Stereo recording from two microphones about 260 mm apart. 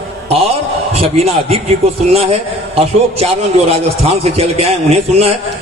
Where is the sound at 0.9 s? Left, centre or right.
Right.